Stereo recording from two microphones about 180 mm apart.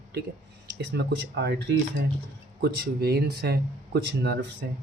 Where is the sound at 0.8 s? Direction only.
75° right (ahead or behind).